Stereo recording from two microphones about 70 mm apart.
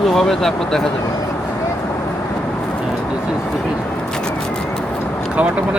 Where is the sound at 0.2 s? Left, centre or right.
Centre.